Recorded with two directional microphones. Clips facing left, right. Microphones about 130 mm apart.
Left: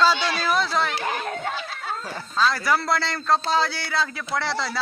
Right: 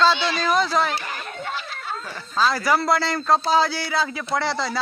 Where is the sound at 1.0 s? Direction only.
90° left.